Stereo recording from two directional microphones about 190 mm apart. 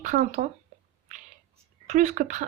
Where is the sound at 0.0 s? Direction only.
40° right (ahead or behind).